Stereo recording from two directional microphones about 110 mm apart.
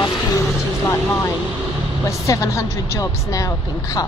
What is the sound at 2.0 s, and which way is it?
Speech, 30° left (ahead or behind).